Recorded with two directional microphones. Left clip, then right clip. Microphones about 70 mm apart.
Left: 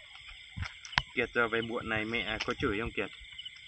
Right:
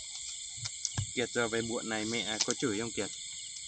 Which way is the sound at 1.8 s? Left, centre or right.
Centre.